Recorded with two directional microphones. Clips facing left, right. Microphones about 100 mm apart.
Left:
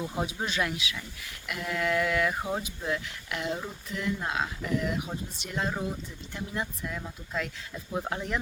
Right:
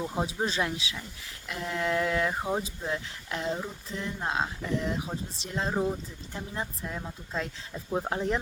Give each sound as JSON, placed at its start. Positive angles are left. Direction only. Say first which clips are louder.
{"t": 0.0, "sound": "speech", "louder": "right 2 dB", "side_deg": -25}
{"t": 2.4, "sound": "speech", "louder": "right 2 dB", "side_deg": -20}
{"t": 2.6, "sound": "speech", "louder": "left 1 dB", "side_deg": -30}
{"t": 3.5, "sound": "a sound", "louder": "even", "side_deg": 5}
{"t": 3.8, "sound": "speech", "louder": "left 3 dB", "side_deg": -30}